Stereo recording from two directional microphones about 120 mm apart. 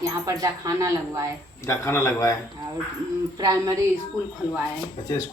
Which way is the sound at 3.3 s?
30° right (ahead or behind).